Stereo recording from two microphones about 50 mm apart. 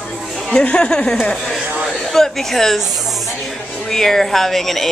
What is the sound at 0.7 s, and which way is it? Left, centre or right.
Speech, centre.